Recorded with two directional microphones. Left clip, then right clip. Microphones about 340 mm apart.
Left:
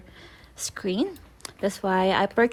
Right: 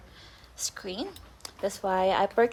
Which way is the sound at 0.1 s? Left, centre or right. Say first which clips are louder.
Left 4 dB; centre.